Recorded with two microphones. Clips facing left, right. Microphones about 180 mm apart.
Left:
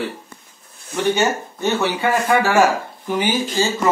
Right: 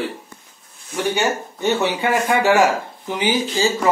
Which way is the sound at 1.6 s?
15° right (ahead or behind).